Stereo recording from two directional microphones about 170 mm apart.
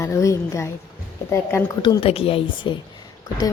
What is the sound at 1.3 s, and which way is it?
Speech, 15° left (ahead or behind).